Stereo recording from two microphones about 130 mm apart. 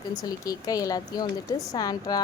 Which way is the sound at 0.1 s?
30° left (ahead or behind).